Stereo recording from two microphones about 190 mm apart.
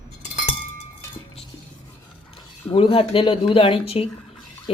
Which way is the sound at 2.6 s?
30° left (ahead or behind).